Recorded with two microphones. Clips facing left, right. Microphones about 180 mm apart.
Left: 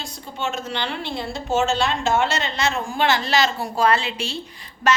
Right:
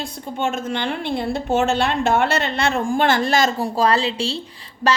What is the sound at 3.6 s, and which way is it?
Speech, 35° right (ahead or behind).